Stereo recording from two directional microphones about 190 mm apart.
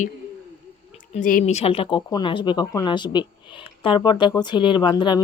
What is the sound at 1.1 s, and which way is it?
Speech, 45° left (ahead or behind).